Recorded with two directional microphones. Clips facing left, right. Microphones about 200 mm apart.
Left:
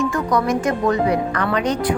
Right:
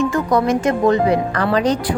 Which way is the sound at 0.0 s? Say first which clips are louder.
Right 3 dB; 25° right (ahead or behind).